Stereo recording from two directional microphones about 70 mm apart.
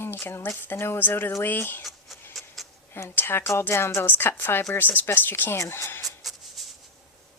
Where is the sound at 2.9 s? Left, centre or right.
Left.